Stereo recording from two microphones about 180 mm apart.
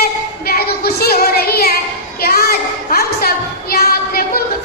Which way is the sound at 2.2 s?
55° left (ahead or behind).